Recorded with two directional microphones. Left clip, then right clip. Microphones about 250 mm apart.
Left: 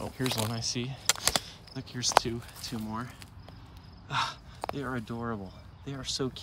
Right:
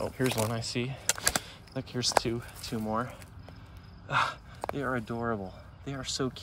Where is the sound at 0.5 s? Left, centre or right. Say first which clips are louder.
Even; centre.